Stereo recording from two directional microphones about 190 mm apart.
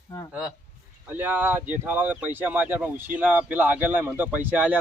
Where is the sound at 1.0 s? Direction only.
10° right (ahead or behind).